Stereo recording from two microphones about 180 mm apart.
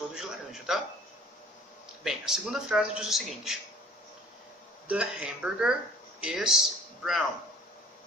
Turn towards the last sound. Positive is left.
turn(degrees=0)  # may be behind; listen again after turning